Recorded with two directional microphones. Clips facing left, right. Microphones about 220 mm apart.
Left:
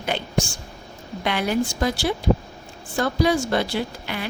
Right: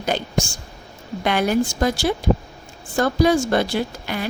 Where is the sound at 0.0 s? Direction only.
40° right (ahead or behind).